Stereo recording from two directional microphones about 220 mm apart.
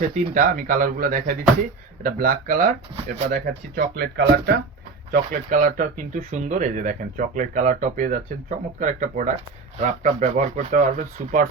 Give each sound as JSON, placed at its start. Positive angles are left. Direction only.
{"t": 0.3, "sound": "speech", "side_deg": -40}
{"t": 5.3, "sound": "speech", "side_deg": -35}